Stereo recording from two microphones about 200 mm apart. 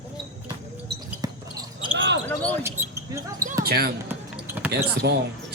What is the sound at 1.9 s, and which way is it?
Basketball bounce, 65° right (ahead or behind).